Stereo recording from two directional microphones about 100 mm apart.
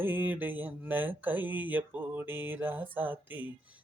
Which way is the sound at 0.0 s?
20° right (ahead or behind).